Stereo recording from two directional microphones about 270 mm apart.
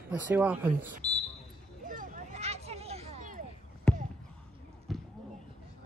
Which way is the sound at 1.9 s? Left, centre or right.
Right.